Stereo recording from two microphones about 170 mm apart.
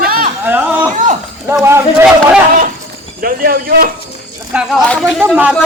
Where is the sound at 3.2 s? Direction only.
60° right (ahead or behind).